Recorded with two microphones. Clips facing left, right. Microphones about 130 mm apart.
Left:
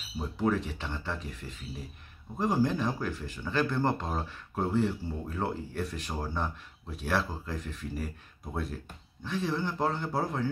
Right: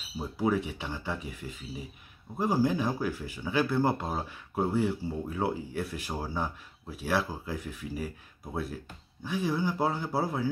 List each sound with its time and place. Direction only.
0.2 s speech: 10° right (ahead or behind)
9.2 s speech: 10° right (ahead or behind)